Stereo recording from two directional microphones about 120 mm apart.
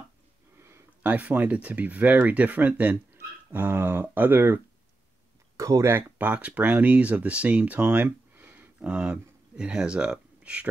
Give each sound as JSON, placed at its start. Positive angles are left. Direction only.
{"t": 0.6, "sound": "speech", "side_deg": -15}
{"t": 5.6, "sound": "speech", "side_deg": -25}